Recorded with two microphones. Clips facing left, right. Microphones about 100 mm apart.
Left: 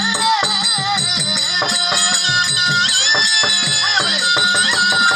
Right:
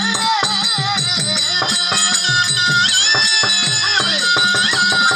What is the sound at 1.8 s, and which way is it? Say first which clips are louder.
Music: left 1 dB; 15° left (ahead or behind).